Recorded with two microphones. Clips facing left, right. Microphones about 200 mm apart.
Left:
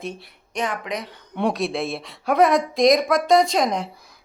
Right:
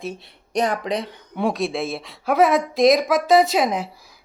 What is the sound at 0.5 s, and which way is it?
Speech, 35° right (ahead or behind).